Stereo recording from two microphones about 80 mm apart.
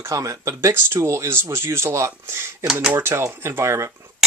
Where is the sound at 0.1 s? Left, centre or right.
Right.